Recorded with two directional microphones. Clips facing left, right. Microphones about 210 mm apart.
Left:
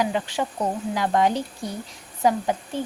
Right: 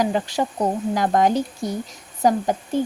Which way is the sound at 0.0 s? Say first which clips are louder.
Right 3 dB; 40° right (ahead or behind).